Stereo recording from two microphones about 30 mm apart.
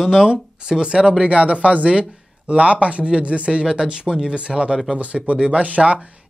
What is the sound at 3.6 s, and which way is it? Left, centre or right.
Speech, right.